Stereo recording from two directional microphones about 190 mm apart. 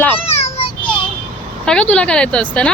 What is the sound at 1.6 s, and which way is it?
Speech, 5° left (ahead or behind).